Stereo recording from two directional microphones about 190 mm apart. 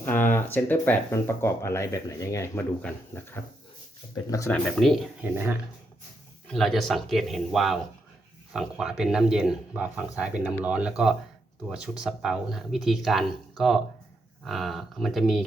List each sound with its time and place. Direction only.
0.0 s speech: 10° left (ahead or behind)
4.5 s speech: centre (ahead or behind)
6.5 s speech: centre (ahead or behind)